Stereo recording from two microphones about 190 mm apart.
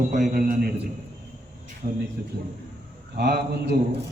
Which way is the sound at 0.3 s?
50° right (ahead or behind).